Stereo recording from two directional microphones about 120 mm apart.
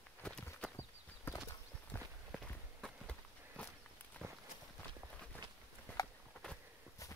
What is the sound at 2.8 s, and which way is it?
Walk, 10° left (ahead or behind).